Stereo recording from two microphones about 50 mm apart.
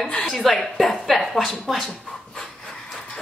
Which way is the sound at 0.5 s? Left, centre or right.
Centre.